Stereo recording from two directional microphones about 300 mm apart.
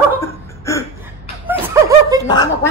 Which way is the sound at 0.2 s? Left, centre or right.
Centre.